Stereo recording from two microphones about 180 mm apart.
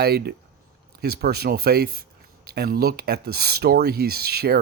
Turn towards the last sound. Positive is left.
turn(degrees=-60)  # may be behind; listen again after turning